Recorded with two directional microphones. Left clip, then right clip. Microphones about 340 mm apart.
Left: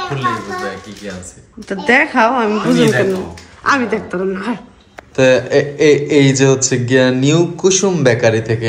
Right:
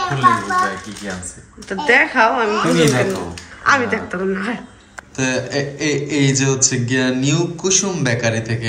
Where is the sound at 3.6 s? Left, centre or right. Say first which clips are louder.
Left 1 dB; centre.